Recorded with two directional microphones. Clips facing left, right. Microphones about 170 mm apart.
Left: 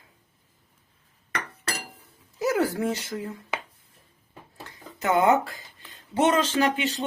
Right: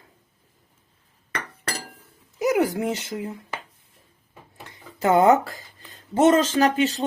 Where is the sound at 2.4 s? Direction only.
15° right (ahead or behind).